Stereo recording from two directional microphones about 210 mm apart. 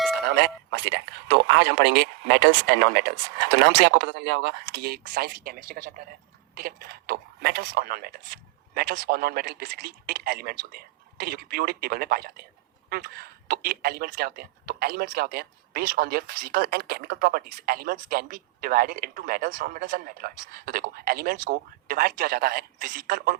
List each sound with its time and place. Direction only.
0.2 s speech: 50° right (ahead or behind)